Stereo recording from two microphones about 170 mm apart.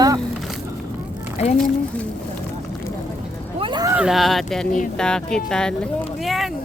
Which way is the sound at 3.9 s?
5° right (ahead or behind).